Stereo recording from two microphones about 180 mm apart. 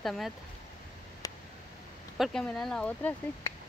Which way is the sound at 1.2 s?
20° left (ahead or behind).